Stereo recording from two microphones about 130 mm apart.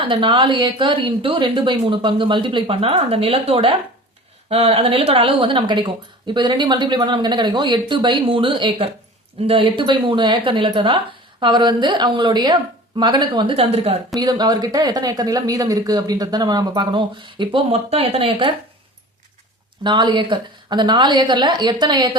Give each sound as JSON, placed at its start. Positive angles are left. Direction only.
{"t": 0.0, "sound": "speech", "side_deg": -40}
{"t": 13.6, "sound": "a woman's voice", "side_deg": -50}
{"t": 14.2, "sound": "speech", "side_deg": -30}
{"t": 19.8, "sound": "speech", "side_deg": -35}